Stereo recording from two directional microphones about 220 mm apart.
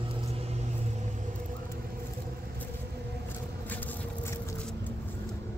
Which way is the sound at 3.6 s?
10° left (ahead or behind).